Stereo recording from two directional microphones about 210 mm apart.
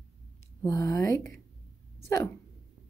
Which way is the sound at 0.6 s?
15° left (ahead or behind).